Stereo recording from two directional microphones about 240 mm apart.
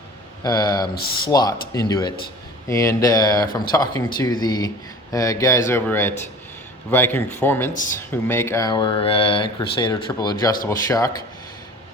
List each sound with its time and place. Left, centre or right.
0.4 s speech: centre
0.9 s speech: left
1.3 s speech: centre
7.7 s speech: left
7.9 s speech: centre